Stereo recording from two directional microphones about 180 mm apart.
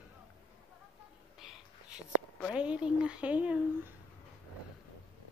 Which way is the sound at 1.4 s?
5° right (ahead or behind).